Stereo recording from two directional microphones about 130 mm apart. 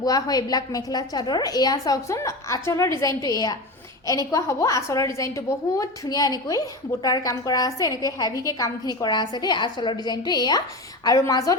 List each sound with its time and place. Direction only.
0.0 s a woman's voice: 30° left (ahead or behind)